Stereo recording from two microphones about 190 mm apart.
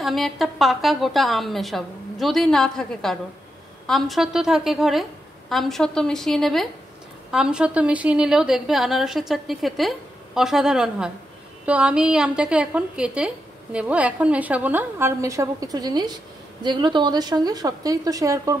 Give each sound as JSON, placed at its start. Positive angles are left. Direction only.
{"t": 0.0, "sound": "a woman's voice", "side_deg": 0}